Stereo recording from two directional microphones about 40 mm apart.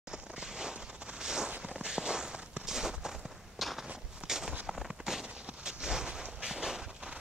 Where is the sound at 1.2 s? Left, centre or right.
Centre.